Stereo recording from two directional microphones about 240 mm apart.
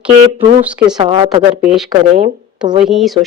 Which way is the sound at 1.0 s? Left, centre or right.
Centre.